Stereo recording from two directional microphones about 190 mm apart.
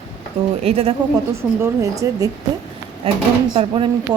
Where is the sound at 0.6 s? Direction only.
30° right (ahead or behind).